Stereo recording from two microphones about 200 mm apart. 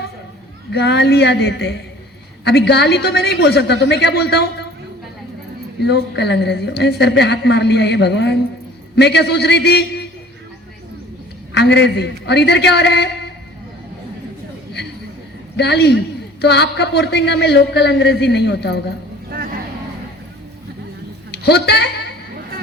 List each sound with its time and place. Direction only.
0.7 s a woman's voice: 55° left (ahead or behind)
5.8 s a woman's voice: 55° left (ahead or behind)
11.5 s a woman's voice: 60° left (ahead or behind)
15.5 s a woman's voice: 55° left (ahead or behind)
21.3 s a woman's voice: 55° left (ahead or behind)